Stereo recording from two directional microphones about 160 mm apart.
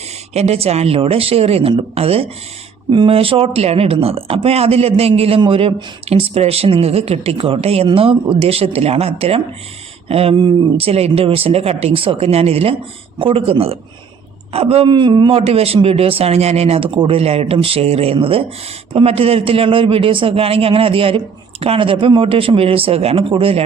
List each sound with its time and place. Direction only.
0.3 s speech: 40° right (ahead or behind)